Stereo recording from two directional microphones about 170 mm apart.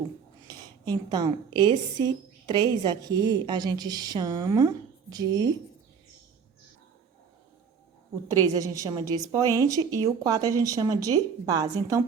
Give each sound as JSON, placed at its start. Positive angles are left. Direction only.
{"t": 0.4, "sound": "a woman's voice", "side_deg": -20}
{"t": 8.5, "sound": "a woman's voice", "side_deg": -20}